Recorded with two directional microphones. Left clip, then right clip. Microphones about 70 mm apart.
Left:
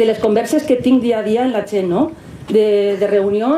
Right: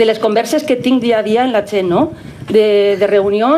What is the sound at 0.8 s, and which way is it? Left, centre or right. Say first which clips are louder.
Speech: right 2 dB; right.